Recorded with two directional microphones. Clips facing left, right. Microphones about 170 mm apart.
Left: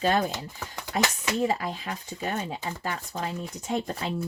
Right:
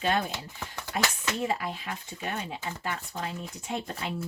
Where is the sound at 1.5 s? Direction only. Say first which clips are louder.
Left 3 dB; 40° left (ahead or behind).